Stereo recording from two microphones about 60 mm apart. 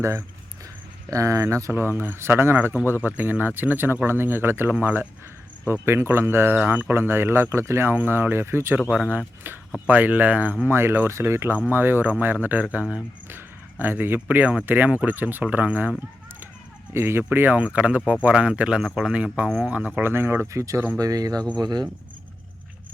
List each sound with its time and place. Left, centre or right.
1.1 s speech: right
1.7 s speech: right
6.6 s speech: right
6.9 s speech: right
9.0 s speech: right
10.7 s speech: right
16.9 s speech: right
20.0 s speech: right
20.5 s speech: right
21.0 s speech: right